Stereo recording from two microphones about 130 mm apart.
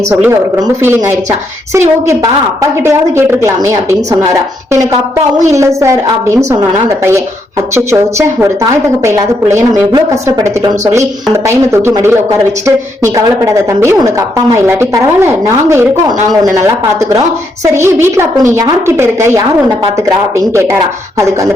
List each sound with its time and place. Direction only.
0.1 s a woman's voice: 15° right (ahead or behind)